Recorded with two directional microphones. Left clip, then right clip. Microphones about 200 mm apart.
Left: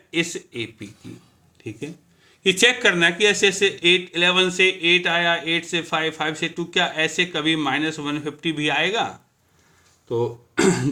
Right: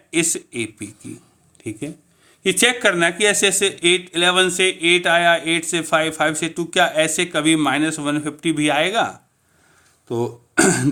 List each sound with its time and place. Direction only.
0.1 s speech: 55° right (ahead or behind)
1.6 s a sound: 50° right (ahead or behind)
2.4 s speech: 35° right (ahead or behind)
10.1 s speech: 55° right (ahead or behind)